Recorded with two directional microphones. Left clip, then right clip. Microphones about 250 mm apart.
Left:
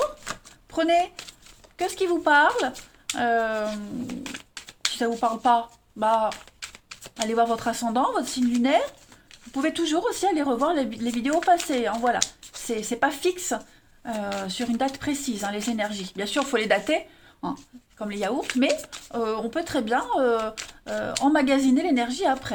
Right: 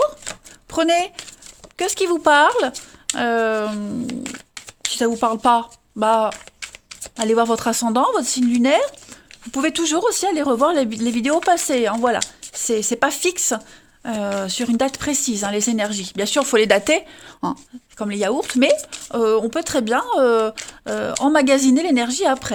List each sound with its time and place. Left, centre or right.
0.7 s speech: right
4.9 s speech: right